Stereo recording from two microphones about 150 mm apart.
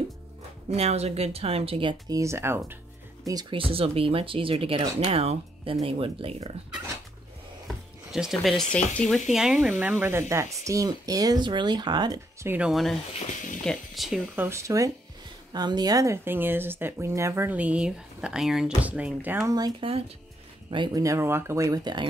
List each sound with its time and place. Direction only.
0.7 s speech: 45° right (ahead or behind); by 2.8 s 15° right (ahead or behind)
3.3 s speech: 30° right (ahead or behind)
7.6 s speech: centre (ahead or behind); by 12.2 s 30° right (ahead or behind)
12.4 s speech: 5° right (ahead or behind)
14.3 s speech: 15° right (ahead or behind)
19.5 s speech: 25° right (ahead or behind)